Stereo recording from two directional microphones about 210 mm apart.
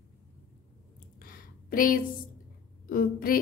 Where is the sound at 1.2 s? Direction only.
40° left (ahead or behind).